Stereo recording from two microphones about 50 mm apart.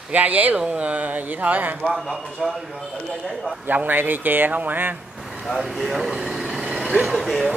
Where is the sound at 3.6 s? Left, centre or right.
Right.